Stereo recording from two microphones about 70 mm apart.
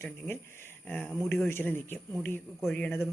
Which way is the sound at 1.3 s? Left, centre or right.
Left.